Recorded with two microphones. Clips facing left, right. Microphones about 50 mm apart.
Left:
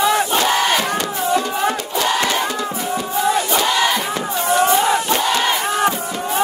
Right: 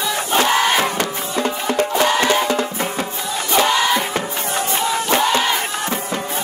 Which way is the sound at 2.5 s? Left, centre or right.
Right.